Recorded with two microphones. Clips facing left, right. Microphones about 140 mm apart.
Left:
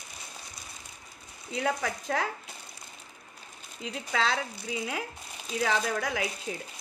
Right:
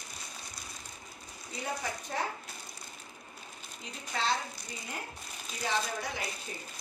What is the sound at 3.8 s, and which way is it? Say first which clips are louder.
Speech: left 6 dB; 90° left.